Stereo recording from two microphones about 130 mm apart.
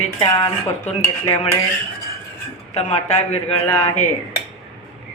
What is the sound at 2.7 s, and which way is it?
Speech, 60° left (ahead or behind).